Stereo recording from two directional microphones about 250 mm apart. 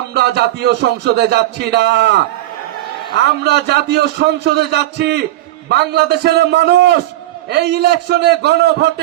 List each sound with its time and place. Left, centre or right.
0.1 s speech: right
3.4 s a man's voice: right